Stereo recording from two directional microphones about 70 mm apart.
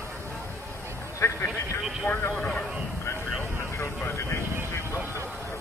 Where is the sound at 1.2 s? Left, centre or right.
Left.